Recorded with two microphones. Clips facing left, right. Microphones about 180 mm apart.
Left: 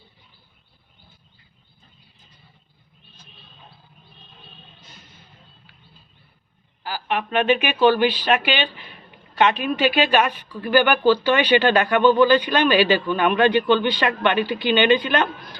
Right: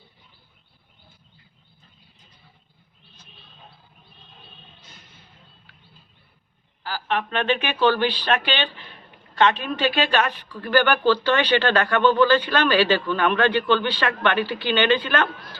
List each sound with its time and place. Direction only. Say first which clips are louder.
6.8 s speech: left 1 dB; 15° left (ahead or behind)